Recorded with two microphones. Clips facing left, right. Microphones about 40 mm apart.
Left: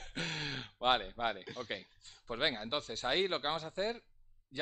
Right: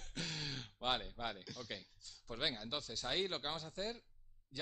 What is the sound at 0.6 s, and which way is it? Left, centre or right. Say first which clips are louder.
Speech: left 9 dB; left.